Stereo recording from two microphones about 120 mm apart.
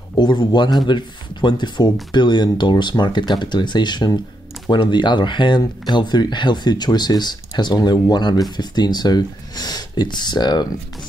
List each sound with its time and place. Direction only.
0.1 s speech: 40° left (ahead or behind)